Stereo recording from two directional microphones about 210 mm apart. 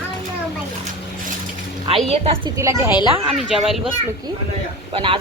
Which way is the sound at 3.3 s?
Centre (ahead or behind).